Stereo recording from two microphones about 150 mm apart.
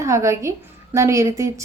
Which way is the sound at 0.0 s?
20° right (ahead or behind).